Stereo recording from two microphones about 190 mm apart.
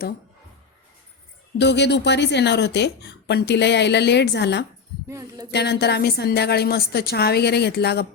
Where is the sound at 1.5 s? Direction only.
65° left (ahead or behind).